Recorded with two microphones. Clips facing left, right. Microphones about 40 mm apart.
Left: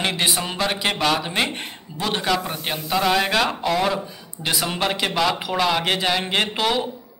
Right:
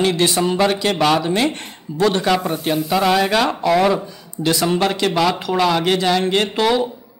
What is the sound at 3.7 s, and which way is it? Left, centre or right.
Speech, centre.